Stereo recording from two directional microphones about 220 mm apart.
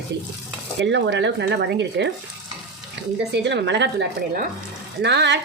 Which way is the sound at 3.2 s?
50° right (ahead or behind).